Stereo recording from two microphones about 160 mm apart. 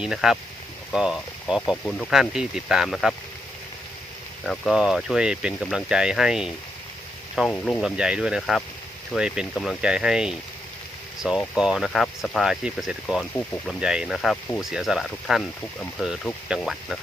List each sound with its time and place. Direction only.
0.0 s speech: 5° right (ahead or behind)
1.7 s speech: 5° left (ahead or behind)
4.4 s speech: centre (ahead or behind)
11.5 s speech: 5° right (ahead or behind)